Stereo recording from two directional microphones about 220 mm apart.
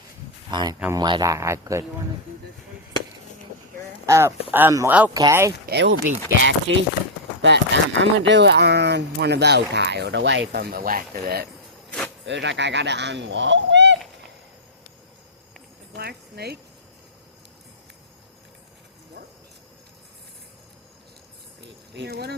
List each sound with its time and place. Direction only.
0.5 s a man's voice: 20° right (ahead or behind)
4.0 s a man's voice: 15° right (ahead or behind)
5.6 s speech: 50° right (ahead or behind)
12.2 s speech: 55° right (ahead or behind)
16.0 s a sound: 45° right (ahead or behind)
21.9 s speech: 50° right (ahead or behind)